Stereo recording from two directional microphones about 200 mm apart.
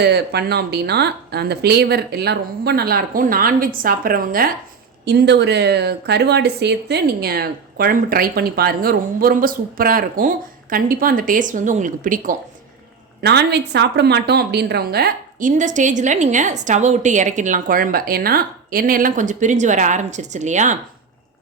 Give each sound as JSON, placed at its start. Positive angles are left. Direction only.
{"t": 0.0, "sound": "speech", "side_deg": -55}
{"t": 5.0, "sound": "speech", "side_deg": -55}
{"t": 13.2, "sound": "a woman's voice", "side_deg": -60}